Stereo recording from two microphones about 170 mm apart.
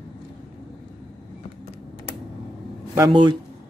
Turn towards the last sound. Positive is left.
turn(degrees=-25)  # may be behind; listen again after turning